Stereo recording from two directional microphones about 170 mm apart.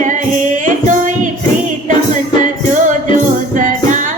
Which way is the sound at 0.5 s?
50° right (ahead or behind).